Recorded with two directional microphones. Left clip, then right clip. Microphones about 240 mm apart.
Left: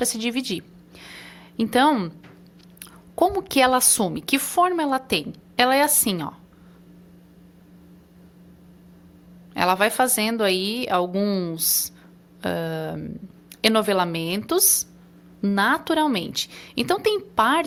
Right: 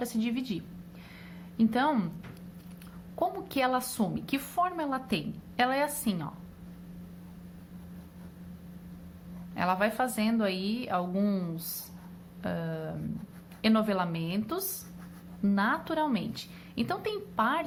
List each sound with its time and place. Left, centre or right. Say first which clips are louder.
0.0 s a woman's voice: left 8 dB; left
1.0 s a sound: left 12 dB; left
3.2 s a woman's voice: left 11 dB; left
9.6 s a woman's voice: left 9 dB; left